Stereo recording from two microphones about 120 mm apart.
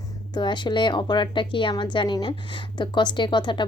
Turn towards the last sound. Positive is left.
turn(degrees=40)  # may be behind; listen again after turning